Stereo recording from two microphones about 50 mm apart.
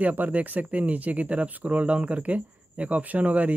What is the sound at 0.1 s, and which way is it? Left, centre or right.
Speech, right.